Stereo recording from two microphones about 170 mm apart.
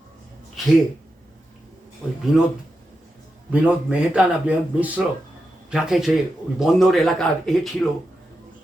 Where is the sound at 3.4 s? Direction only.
10° right (ahead or behind); by 8.0 s 10° left (ahead or behind).